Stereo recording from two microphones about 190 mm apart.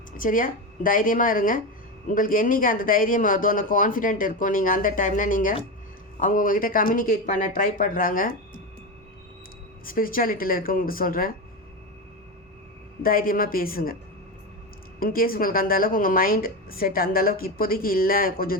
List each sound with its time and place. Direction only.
0.2 s a woman's voice: 45° left (ahead or behind)
9.8 s a woman's voice: 50° left (ahead or behind)
13.0 s a woman's voice: 50° left (ahead or behind)
14.9 s a woman's voice: 50° left (ahead or behind)